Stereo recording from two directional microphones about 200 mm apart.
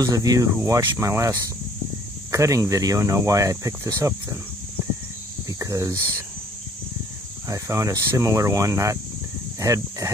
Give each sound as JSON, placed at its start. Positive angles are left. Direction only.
{"t": 0.0, "sound": "speech", "side_deg": -20}
{"t": 5.5, "sound": "speech", "side_deg": -15}
{"t": 7.4, "sound": "speech", "side_deg": -15}